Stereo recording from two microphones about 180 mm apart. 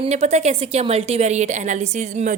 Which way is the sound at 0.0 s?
40° right (ahead or behind).